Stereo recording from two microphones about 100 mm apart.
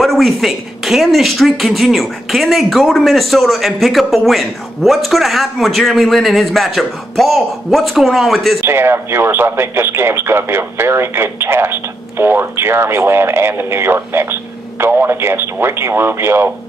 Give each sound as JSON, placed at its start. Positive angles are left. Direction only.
{"t": 0.0, "sound": "speech", "side_deg": 0}
{"t": 8.5, "sound": "speech", "side_deg": -25}